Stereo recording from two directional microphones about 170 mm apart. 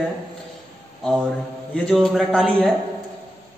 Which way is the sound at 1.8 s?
5° left (ahead or behind).